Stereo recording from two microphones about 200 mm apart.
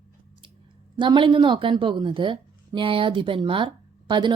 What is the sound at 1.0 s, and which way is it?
A woman's voice, 25° right (ahead or behind).